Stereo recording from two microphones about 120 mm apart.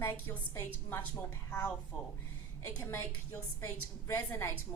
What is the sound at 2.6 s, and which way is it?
A woman's voice, 20° left (ahead or behind).